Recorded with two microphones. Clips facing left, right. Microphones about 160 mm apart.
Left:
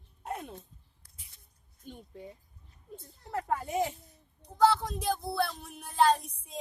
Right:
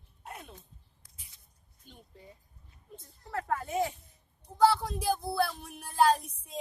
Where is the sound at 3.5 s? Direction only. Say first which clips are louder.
Left 1 dB; centre (ahead or behind).